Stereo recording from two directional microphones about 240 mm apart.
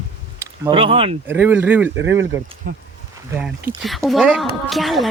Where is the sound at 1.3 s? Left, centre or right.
Centre.